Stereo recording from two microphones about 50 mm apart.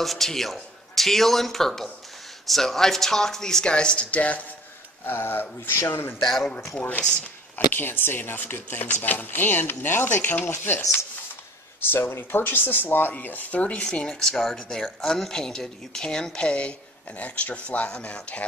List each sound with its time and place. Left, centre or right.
0.0 s a man's voice: centre; by 4.5 s left
5.0 s speech: left
6.2 s a man's voice: centre
7.5 s speech: left
11.9 s speech: left
13.9 s speech: centre